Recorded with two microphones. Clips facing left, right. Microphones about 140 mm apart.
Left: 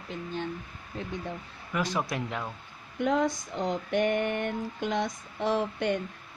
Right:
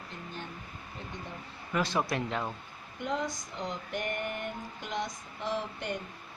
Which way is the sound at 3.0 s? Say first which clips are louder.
Left 7 dB; 65° left (ahead or behind).